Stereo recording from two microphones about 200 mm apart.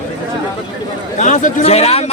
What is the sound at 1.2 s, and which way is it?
Speech, 40° left (ahead or behind).